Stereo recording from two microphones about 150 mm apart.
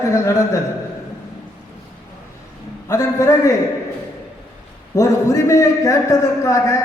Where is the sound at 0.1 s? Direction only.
20° left (ahead or behind).